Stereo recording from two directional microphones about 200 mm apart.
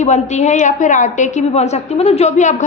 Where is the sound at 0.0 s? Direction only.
35° left (ahead or behind).